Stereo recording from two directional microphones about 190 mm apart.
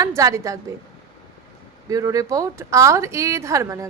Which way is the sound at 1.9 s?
20° right (ahead or behind).